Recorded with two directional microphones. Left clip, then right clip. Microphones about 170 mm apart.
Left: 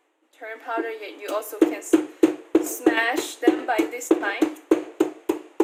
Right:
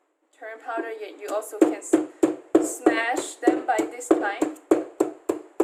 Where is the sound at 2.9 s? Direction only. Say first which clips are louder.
Left 2 dB; 25° left (ahead or behind).